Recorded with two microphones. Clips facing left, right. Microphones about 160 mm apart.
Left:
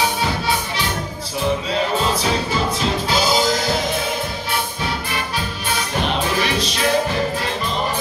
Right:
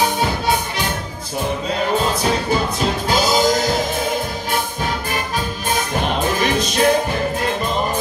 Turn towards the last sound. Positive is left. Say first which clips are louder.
# right 3 dB
turn(degrees=-50)  # may be behind; listen again after turning